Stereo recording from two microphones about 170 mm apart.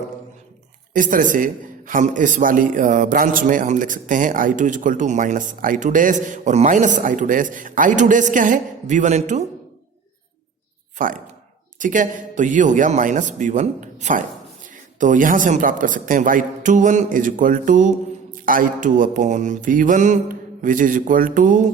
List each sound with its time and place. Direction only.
0.9 s a man's voice: 50° right (ahead or behind)
10.9 s a man's voice: 50° right (ahead or behind)